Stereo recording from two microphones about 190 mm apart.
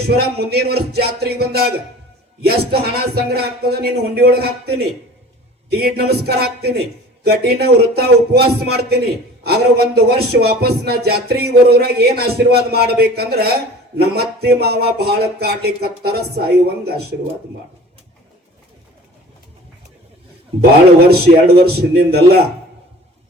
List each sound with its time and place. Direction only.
0.2 s speech: 55° right (ahead or behind)
5.8 s speech: 55° right (ahead or behind)
21.1 s speech: 55° right (ahead or behind)